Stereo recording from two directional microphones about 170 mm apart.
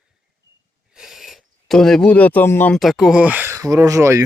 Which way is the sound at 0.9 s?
Centre (ahead or behind).